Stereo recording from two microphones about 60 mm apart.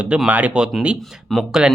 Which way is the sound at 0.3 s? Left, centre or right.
Right.